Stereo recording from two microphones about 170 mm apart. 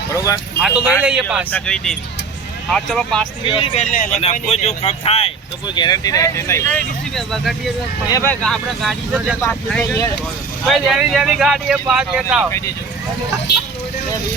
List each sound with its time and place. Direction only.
0.1 s speech: 20° left (ahead or behind)
0.6 s speech: 5° right (ahead or behind)
1.5 s speech: 5° left (ahead or behind)
3.4 s speech: 30° left (ahead or behind)
3.9 s speech: 50° left (ahead or behind)
4.2 s speech: 35° left (ahead or behind); by 7.7 s centre (ahead or behind)
8.1 s speech: 10° left (ahead or behind)
9.8 s speech: 20° left (ahead or behind)
10.7 s speech: centre (ahead or behind)
12.5 s speech: 15° left (ahead or behind)